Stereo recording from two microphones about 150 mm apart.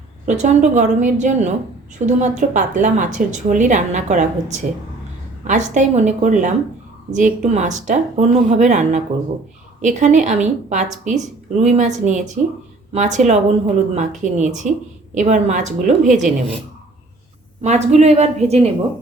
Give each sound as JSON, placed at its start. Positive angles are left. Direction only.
{"t": 0.3, "sound": "a woman's voice", "side_deg": -50}
{"t": 17.6, "sound": "a woman's voice", "side_deg": -50}